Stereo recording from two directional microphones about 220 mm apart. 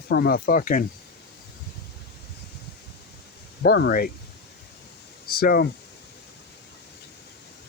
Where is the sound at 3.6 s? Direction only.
45° left (ahead or behind).